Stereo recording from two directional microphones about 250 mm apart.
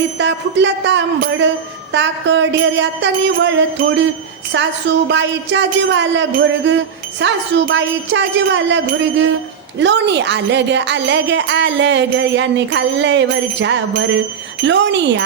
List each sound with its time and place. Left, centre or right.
0.2 s speech: right